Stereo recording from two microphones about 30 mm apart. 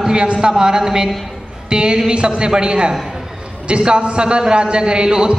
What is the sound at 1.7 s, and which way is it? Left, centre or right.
A man's voice, right.